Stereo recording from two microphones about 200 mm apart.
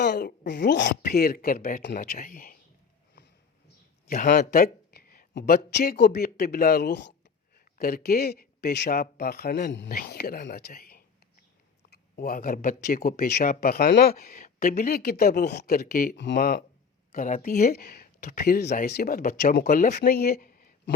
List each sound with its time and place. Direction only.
0.0 s speech: 55° left (ahead or behind)
4.0 s speech: 45° left (ahead or behind)
16.1 s speech: 60° left (ahead or behind)